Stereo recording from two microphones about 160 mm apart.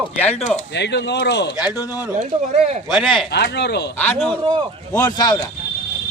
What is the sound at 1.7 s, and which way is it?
Speech, 20° left (ahead or behind).